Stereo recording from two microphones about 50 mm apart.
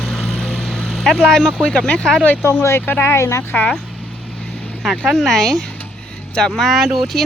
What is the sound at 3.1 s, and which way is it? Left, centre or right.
Speech, left.